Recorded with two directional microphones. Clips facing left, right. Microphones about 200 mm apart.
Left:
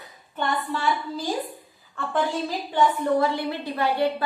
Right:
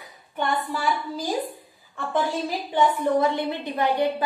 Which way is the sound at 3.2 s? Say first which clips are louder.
Right 1 dB; 20° right (ahead or behind).